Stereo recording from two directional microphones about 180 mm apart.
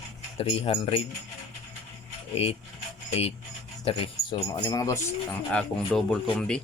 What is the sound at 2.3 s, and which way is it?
A man's voice, 35° left (ahead or behind).